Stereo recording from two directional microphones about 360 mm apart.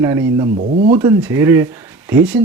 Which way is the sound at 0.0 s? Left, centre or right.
Centre.